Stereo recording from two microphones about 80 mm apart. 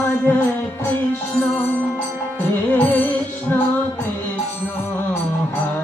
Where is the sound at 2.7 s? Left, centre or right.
Left.